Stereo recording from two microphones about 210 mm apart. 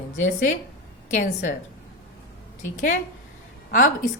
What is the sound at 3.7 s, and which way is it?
Speech, 40° left (ahead or behind).